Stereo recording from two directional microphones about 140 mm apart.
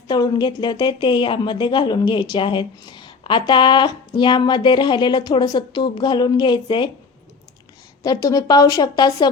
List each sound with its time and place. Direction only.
0.1 s a woman's voice: 30° left (ahead or behind)
8.0 s a woman's voice: 25° left (ahead or behind)